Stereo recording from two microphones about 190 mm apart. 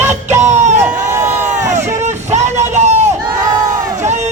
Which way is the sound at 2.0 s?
35° right (ahead or behind).